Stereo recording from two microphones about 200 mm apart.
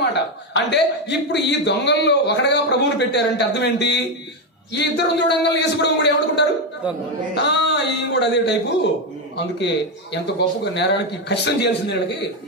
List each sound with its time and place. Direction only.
0.1 s a man's voice: 60° left (ahead or behind)
10.1 s a man's voice: 60° left (ahead or behind)